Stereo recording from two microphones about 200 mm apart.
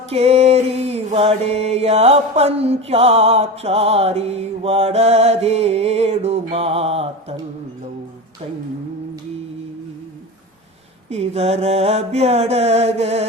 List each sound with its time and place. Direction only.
0.1 s mantra: 30° right (ahead or behind)
11.1 s mantra: 30° right (ahead or behind)